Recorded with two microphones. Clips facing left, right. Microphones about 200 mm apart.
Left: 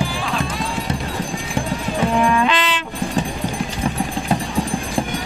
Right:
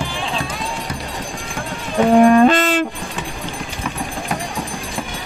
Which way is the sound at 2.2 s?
45° right (ahead or behind).